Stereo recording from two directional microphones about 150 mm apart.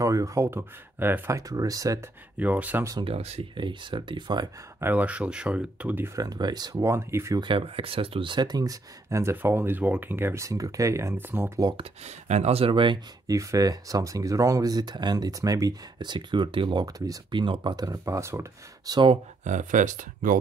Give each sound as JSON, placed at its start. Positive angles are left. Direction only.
{"t": 0.0, "sound": "speech", "side_deg": -20}
{"t": 2.3, "sound": "speech", "side_deg": -10}
{"t": 3.1, "sound": "speech", "side_deg": -45}
{"t": 3.6, "sound": "speech", "side_deg": -30}
{"t": 4.7, "sound": "speech", "side_deg": -10}
{"t": 7.4, "sound": "speech", "side_deg": -35}
{"t": 11.7, "sound": "speech", "side_deg": -40}
{"t": 19.4, "sound": "speech", "side_deg": -55}